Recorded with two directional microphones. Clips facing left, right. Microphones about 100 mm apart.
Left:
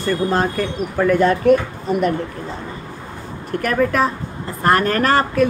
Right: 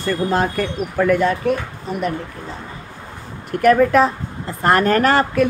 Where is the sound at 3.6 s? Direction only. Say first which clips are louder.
Right 5 dB; 10° right (ahead or behind).